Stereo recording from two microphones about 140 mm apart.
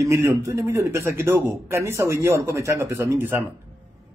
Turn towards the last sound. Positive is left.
turn(degrees=-15)  # may be behind; listen again after turning